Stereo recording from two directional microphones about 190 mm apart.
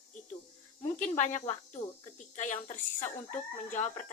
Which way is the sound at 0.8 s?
40° left (ahead or behind).